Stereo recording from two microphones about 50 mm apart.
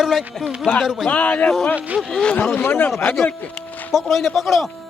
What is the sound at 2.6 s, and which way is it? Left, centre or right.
Speech, left.